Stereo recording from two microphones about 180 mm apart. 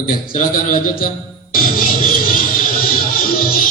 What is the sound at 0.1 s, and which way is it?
A man's voice, 50° left (ahead or behind).